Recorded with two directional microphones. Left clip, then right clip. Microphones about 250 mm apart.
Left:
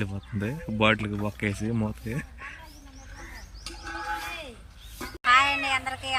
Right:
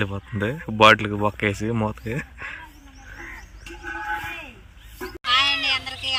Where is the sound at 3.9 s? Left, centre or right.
Centre.